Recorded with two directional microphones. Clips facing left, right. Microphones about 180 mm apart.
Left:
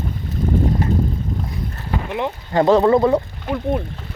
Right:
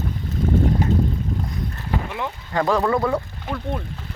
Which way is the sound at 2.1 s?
25° left (ahead or behind).